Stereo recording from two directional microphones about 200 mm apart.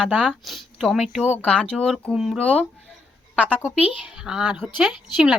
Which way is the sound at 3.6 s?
5° right (ahead or behind).